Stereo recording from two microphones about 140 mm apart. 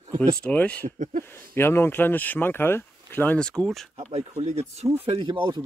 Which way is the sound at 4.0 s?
55° right (ahead or behind).